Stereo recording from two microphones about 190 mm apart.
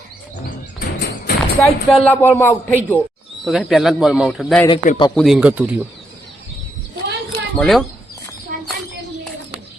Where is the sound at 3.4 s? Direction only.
Centre (ahead or behind).